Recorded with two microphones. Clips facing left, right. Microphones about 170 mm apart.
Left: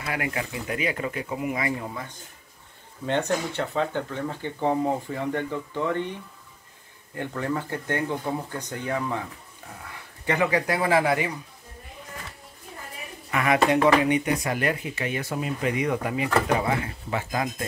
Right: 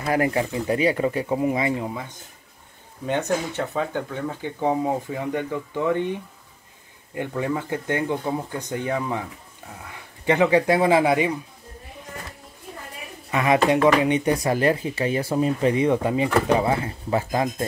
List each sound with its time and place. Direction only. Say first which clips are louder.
0.0 s speech: right 8 dB; 40° right (ahead or behind); by 2.0 s 20° right (ahead or behind)
3.1 s speech: right 1 dB; 5° right (ahead or behind)
7.2 s speech: right 3 dB; 15° right (ahead or behind)
10.2 s speech: right 6 dB; 25° right (ahead or behind)
13.3 s speech: right 2 dB; 20° right (ahead or behind)